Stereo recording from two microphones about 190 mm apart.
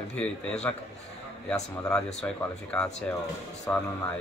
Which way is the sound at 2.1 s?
5° left (ahead or behind).